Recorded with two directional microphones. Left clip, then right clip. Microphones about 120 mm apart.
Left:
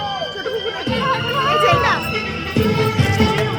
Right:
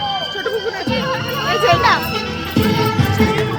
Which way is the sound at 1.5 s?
10° right (ahead or behind).